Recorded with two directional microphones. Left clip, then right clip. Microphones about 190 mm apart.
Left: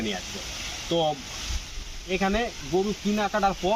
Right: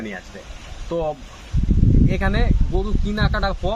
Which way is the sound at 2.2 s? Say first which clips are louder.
Right 2 dB; 10° right (ahead or behind).